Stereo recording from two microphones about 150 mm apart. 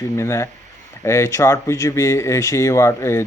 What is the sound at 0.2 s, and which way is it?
Speech, 20° left (ahead or behind).